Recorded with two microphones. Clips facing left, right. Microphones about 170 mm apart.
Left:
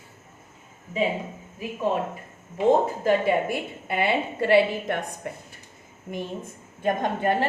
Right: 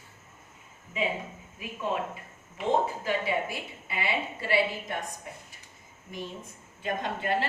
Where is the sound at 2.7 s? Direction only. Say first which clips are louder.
Left 7 dB; 50° left (ahead or behind); by 5.4 s 65° left (ahead or behind).